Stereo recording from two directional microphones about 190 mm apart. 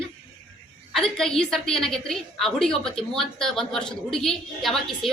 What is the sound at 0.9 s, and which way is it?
A woman's voice, centre (ahead or behind).